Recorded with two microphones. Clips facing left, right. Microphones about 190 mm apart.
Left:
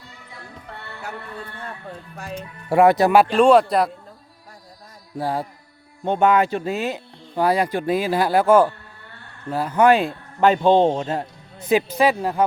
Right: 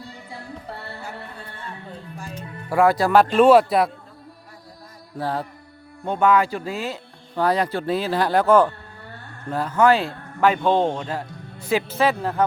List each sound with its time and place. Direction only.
0.3 s music: 35° right (ahead or behind)
2.6 s speech: 20° left (ahead or behind)
3.3 s speech: 5° right (ahead or behind)
5.1 s speech: 10° left (ahead or behind)
6.1 s speech: 20° left (ahead or behind)
10.5 s speech: 30° left (ahead or behind); by 12.5 s 10° left (ahead or behind)